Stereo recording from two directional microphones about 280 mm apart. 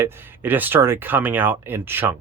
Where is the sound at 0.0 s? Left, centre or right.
Centre.